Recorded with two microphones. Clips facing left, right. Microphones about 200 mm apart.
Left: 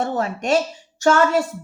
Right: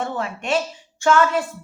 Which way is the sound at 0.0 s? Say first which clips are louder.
Left 4 dB; 40° left (ahead or behind).